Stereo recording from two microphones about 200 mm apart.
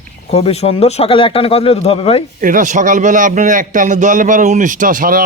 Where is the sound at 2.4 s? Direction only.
40° right (ahead or behind).